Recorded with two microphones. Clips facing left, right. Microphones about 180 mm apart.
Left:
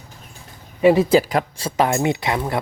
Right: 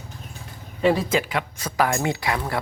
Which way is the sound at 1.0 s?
35° left (ahead or behind).